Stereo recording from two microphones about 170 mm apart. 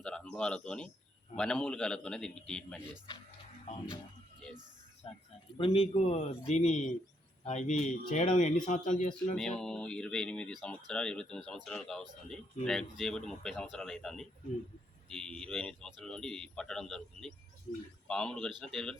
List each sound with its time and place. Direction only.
0.0 s speech: 5° left (ahead or behind)
5.0 s a man's voice: 35° left (ahead or behind)
9.3 s speech: 5° left (ahead or behind)